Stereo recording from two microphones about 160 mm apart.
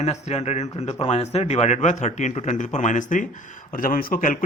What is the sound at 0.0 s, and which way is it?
Speech, 45° left (ahead or behind).